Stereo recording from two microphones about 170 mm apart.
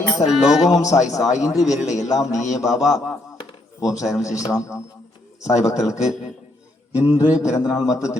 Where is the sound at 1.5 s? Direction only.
20° left (ahead or behind).